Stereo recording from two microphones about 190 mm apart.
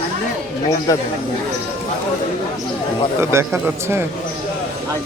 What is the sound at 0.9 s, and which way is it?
Speech, 15° left (ahead or behind).